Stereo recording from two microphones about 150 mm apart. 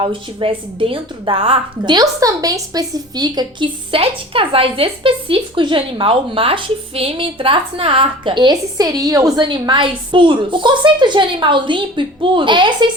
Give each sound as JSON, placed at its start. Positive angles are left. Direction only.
{"t": 0.0, "sound": "a woman's voice", "side_deg": -35}